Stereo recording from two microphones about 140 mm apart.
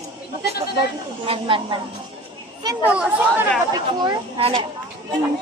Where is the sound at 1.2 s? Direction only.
40° right (ahead or behind).